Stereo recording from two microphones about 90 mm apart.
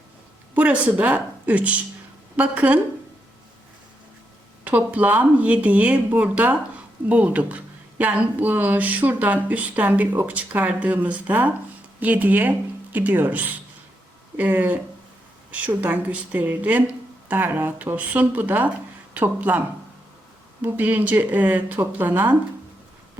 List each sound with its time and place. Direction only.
0.5 s a woman's voice: 15° right (ahead or behind)
4.6 s speech: 15° right (ahead or behind)